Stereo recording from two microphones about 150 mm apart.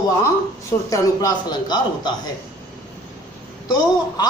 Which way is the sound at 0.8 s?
25° left (ahead or behind).